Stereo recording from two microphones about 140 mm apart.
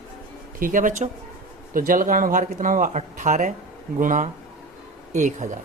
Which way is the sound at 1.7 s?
85° right.